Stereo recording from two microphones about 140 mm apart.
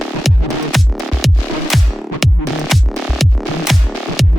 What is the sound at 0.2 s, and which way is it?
Music, centre (ahead or behind).